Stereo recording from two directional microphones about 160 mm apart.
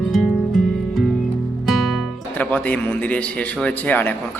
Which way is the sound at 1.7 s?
5° left (ahead or behind).